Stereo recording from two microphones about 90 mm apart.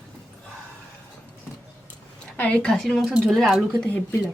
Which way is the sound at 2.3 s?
15° left (ahead or behind).